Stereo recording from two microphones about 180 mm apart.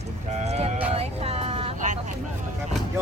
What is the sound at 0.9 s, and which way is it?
Vehicle, 35° right (ahead or behind).